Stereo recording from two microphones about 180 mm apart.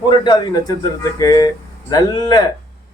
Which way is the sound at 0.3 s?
25° left (ahead or behind).